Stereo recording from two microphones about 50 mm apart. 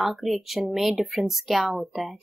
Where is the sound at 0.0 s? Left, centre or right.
Centre.